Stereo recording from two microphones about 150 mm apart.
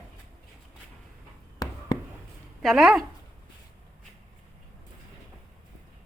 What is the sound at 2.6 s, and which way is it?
Speech, centre (ahead or behind).